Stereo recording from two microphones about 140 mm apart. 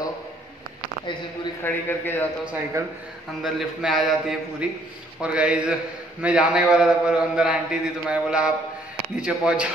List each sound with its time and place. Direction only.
1.6 s a man's voice: 15° left (ahead or behind)
2.8 s a man's voice: 20° right (ahead or behind)
3.4 s a man's voice: centre (ahead or behind)